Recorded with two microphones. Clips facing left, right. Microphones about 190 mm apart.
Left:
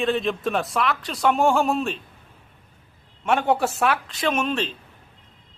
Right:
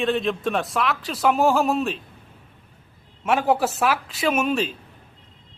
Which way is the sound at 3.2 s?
Centre (ahead or behind).